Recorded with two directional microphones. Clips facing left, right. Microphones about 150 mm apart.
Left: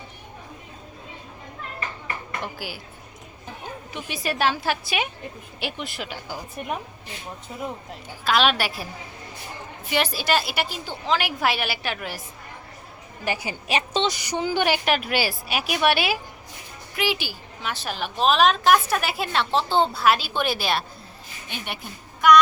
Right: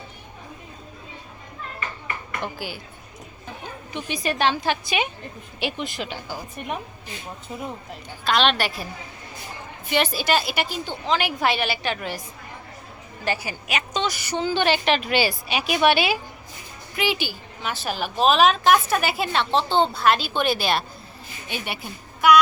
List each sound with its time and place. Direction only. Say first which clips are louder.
2.4 s a woman's voice: right 2 dB; 5° left (ahead or behind)
3.9 s a woman's voice: right 2 dB; 5° left (ahead or behind)
8.2 s a woman's voice: even; 5° left (ahead or behind)
9.9 s a woman's voice: right 1 dB; centre (ahead or behind)
13.2 s a woman's voice: right 1 dB; 15° left (ahead or behind)
13.7 s a woman's voice: left 2 dB; 30° left (ahead or behind); by 22.4 s 5° right (ahead or behind)